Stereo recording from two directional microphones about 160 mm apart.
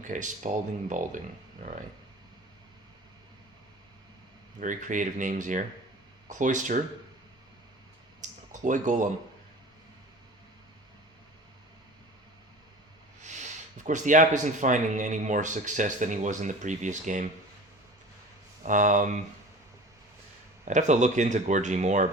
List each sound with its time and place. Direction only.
0.0 s speech: 50° right (ahead or behind)
4.6 s speech: 55° right (ahead or behind)
8.2 s a sound: 50° right (ahead or behind)
13.2 s speech: 50° right (ahead or behind)
18.6 s speech: 55° right (ahead or behind)
20.7 s speech: 50° right (ahead or behind)